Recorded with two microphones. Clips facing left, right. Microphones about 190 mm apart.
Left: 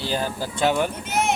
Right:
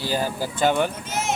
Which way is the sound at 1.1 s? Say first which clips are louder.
Left 3 dB; 60° left (ahead or behind).